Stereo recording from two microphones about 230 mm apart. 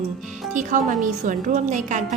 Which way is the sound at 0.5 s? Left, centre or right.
Right.